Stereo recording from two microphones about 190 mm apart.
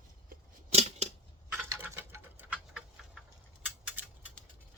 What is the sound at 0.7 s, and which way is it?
Scissors, 35° right (ahead or behind).